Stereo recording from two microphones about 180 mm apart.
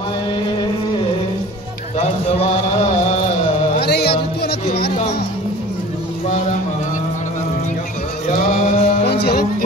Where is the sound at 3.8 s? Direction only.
60° left (ahead or behind).